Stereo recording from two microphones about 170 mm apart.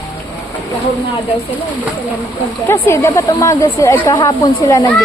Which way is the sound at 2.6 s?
15° left (ahead or behind).